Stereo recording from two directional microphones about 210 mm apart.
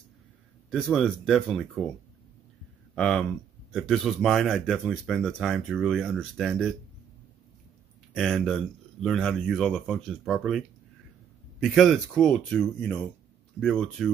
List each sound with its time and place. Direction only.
0.7 s speech: centre (ahead or behind)
3.0 s speech: centre (ahead or behind)
8.1 s speech: 5° left (ahead or behind)
11.6 s speech: centre (ahead or behind)